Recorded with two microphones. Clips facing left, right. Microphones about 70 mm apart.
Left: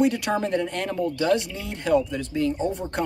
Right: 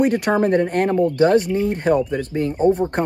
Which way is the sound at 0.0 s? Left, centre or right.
Right.